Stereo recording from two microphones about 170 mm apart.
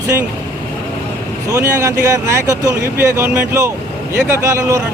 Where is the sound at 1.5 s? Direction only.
20° right (ahead or behind).